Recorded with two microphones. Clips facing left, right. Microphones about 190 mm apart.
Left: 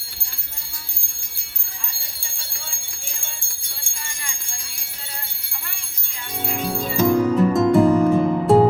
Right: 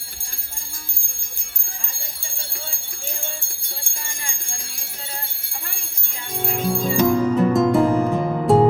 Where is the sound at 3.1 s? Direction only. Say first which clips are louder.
Right 7 dB; 55° right (ahead or behind).